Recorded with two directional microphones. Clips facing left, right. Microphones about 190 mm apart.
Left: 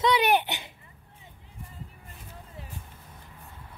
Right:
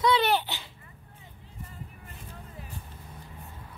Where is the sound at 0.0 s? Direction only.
15° left (ahead or behind).